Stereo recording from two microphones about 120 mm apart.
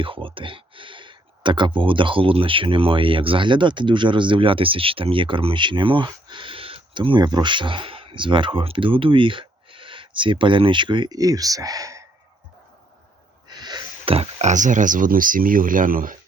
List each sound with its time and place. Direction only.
0.0 s speech: 45° right (ahead or behind); by 12.0 s 30° right (ahead or behind)
13.5 s sneeze: 35° right (ahead or behind)
14.1 s speech: 55° right (ahead or behind); by 15.0 s 90° right